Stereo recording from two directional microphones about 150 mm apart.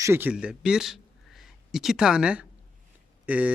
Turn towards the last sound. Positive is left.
turn(degrees=-10)  # may be behind; listen again after turning